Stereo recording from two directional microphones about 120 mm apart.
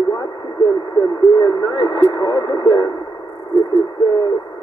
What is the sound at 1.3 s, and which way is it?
Speech, 35° left (ahead or behind).